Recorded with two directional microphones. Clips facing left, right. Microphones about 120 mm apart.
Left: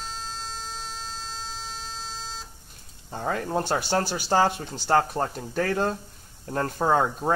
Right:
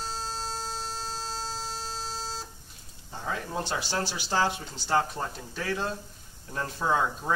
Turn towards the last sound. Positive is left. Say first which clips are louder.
# left 4 dB
turn(degrees=50)  # may be behind; listen again after turning